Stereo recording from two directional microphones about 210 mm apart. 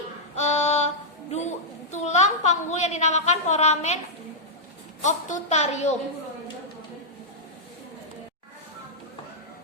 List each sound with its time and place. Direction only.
0.3 s child singing: 30° left (ahead or behind)
5.0 s a woman's voice: 35° left (ahead or behind)